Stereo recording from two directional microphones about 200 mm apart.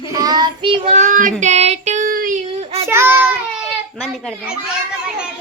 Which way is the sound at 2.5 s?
30° right (ahead or behind).